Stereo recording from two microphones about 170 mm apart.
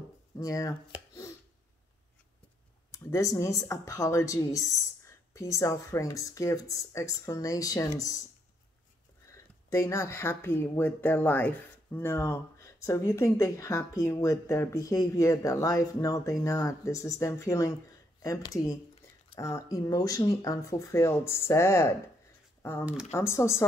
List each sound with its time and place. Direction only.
0.4 s speech: 20° left (ahead or behind)
2.9 s speech: 20° left (ahead or behind)
9.2 s speech: 15° left (ahead or behind)